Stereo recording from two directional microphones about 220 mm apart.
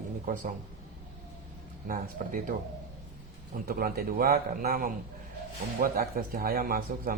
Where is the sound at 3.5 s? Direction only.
40° right (ahead or behind).